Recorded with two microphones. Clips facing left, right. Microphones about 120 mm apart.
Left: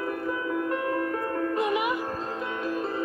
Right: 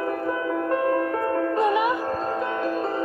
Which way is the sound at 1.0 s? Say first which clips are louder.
Right 5 dB; 60° right (ahead or behind).